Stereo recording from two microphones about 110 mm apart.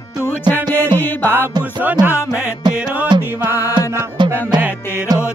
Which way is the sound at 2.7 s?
10° right (ahead or behind).